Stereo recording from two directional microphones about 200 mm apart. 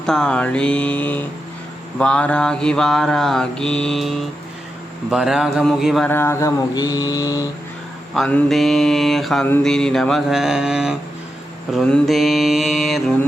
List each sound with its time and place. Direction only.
0.0 s mantra: 5° left (ahead or behind)
6.1 s mantra: 10° left (ahead or behind)
8.1 s mantra: centre (ahead or behind)